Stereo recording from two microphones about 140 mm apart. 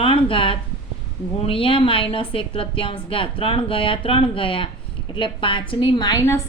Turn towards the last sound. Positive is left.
turn(degrees=25)  # may be behind; listen again after turning